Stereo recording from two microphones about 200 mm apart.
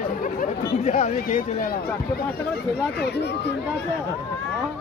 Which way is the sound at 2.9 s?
55° left (ahead or behind).